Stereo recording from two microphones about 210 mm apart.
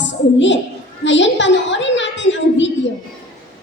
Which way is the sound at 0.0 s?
60° left (ahead or behind).